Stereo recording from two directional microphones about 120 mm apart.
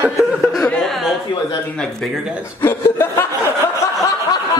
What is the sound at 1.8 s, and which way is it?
Speech, 5° left (ahead or behind).